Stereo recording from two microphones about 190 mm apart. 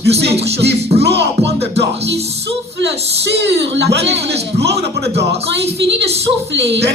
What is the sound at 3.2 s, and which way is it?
Speech, 65° right (ahead or behind).